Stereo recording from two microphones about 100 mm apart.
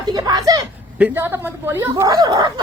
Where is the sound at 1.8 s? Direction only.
25° right (ahead or behind).